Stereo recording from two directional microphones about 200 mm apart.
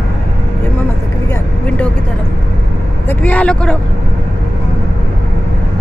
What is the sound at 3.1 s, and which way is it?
Vehicle, 5° left (ahead or behind).